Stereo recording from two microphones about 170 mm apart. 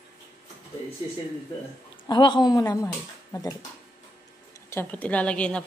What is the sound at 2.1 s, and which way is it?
Speech, 25° left (ahead or behind).